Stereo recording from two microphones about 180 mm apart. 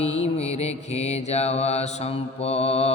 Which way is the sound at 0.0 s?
35° left (ahead or behind).